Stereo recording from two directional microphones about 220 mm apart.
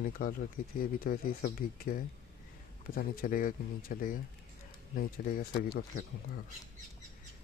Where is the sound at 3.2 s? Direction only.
40° left (ahead or behind).